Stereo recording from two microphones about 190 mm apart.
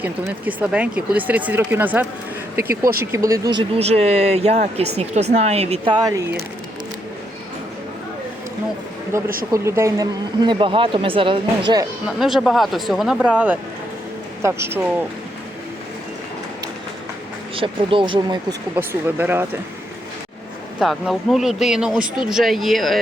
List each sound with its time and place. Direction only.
0.0 s speech: 10° right (ahead or behind)
9.1 s speech: 15° right (ahead or behind)
12.0 s speech: centre (ahead or behind)
17.5 s speech: 30° right (ahead or behind)
18.8 s speech: 10° right (ahead or behind)
20.7 s speech: centre (ahead or behind)